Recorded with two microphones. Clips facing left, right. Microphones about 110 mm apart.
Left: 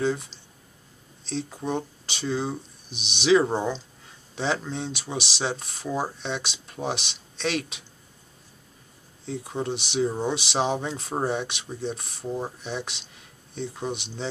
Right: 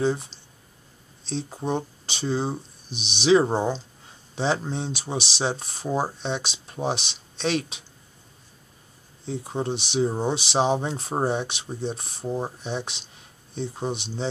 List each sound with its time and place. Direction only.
0.0 s speech: 30° right (ahead or behind)
9.2 s speech: 30° right (ahead or behind)